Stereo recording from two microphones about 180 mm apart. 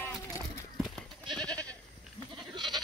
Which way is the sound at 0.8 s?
5° left (ahead or behind).